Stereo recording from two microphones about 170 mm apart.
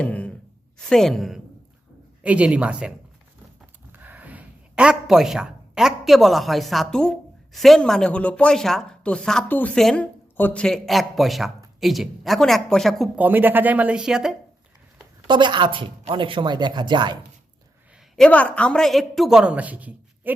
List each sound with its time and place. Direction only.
0.0 s a woman's voice: 10° left (ahead or behind)
3.9 s speech: 10° right (ahead or behind)
13.1 s speech: 10° right (ahead or behind)
15.3 s speech: 25° right (ahead or behind)
18.2 s speech: 10° left (ahead or behind); by 20.3 s 10° right (ahead or behind)